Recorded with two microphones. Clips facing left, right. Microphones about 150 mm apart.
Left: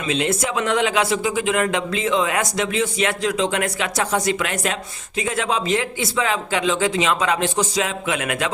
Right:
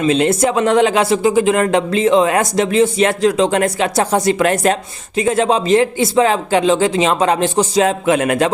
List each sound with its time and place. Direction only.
0.0 s speech: 35° right (ahead or behind)